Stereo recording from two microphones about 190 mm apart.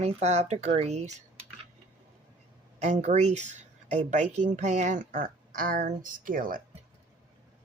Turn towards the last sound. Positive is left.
turn(degrees=-45)  # may be behind; listen again after turning